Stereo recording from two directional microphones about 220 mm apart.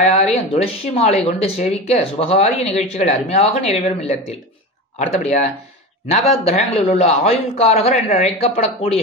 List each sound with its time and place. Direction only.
0.0 s speech: 30° left (ahead or behind)